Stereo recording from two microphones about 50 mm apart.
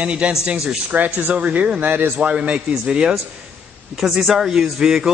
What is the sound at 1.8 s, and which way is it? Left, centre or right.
Speech, right.